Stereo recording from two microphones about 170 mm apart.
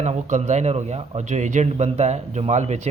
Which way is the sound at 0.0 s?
45° right (ahead or behind).